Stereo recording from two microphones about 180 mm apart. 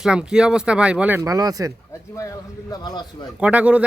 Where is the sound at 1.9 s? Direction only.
15° left (ahead or behind).